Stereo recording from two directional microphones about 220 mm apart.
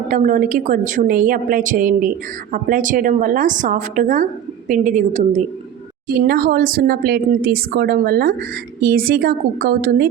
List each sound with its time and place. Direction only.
0.1 s a woman's voice: 35° right (ahead or behind)
6.1 s speech: 45° right (ahead or behind)